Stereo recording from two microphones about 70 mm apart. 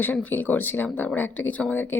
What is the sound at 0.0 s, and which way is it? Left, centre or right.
Speech, left.